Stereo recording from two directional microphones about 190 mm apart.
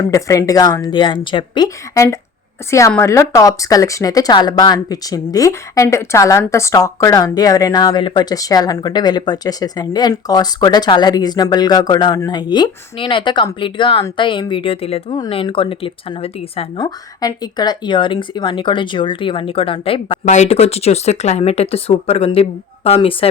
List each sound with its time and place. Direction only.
0.1 s a woman's voice: 15° left (ahead or behind)
16.8 s speech: 20° left (ahead or behind)